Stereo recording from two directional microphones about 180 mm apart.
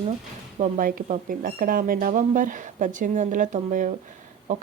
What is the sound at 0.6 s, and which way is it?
Speech, 50° right (ahead or behind).